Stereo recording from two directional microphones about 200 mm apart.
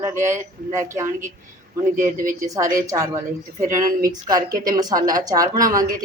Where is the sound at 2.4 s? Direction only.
15° right (ahead or behind).